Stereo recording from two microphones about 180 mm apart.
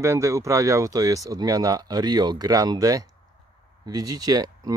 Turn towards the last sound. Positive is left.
turn(degrees=-20)  # may be behind; listen again after turning